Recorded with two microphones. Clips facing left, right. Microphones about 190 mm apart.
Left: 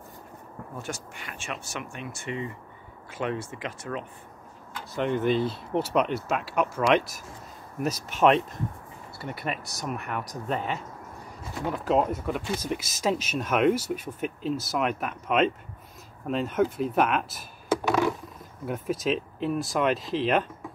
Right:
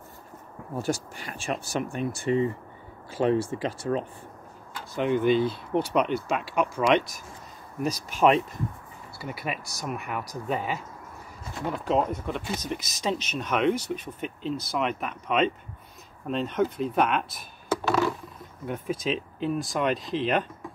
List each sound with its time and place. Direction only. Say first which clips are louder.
0.7 s speech: right 9 dB; 35° right (ahead or behind)
4.9 s speech: right 2 dB; centre (ahead or behind)
17.6 s a sound: left 1 dB; 15° left (ahead or behind)
18.7 s speech: left 2 dB; centre (ahead or behind)